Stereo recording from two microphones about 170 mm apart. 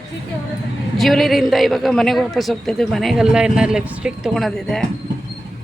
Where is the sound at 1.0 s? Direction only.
Centre (ahead or behind).